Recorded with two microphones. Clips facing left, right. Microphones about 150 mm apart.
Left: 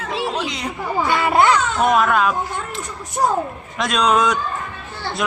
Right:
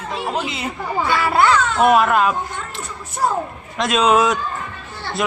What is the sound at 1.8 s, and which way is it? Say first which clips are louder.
Speech: right 2 dB; 5° right (ahead or behind).